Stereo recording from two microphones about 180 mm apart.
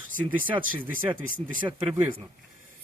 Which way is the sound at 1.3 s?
50° right (ahead or behind).